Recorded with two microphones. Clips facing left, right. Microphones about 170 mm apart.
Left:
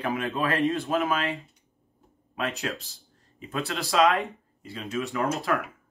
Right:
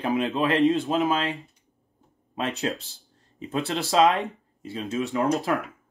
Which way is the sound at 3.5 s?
25° right (ahead or behind).